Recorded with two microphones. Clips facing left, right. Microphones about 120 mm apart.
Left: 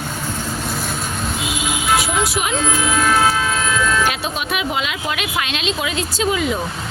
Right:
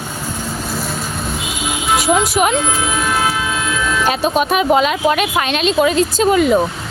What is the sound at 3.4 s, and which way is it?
Vehicle, 10° right (ahead or behind).